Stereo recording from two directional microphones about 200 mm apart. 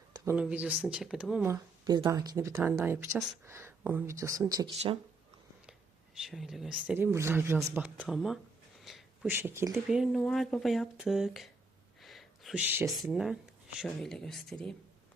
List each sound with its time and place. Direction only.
0.3 s speech: 5° right (ahead or behind)
1.8 s speech: 20° right (ahead or behind)
6.1 s speech: centre (ahead or behind)
7.9 s speech: centre (ahead or behind)
10.0 s speech: centre (ahead or behind)
11.9 s a sound: centre (ahead or behind)
12.9 s speech: centre (ahead or behind)